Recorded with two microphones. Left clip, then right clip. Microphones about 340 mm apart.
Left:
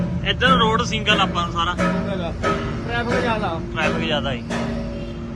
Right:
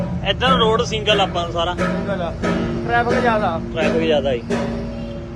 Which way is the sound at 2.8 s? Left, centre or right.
Centre.